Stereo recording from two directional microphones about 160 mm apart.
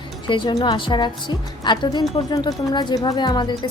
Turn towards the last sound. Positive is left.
turn(degrees=25)  # may be behind; listen again after turning